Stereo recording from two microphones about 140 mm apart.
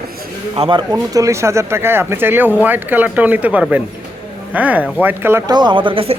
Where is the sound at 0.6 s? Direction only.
35° right (ahead or behind).